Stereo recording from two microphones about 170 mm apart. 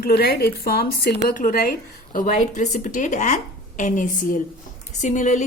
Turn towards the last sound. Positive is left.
turn(degrees=45)  # may be behind; listen again after turning